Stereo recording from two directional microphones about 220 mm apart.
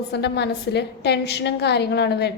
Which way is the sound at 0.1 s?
50° left (ahead or behind).